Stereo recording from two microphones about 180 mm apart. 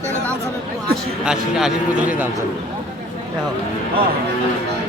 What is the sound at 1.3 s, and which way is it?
A man's voice, 5° right (ahead or behind).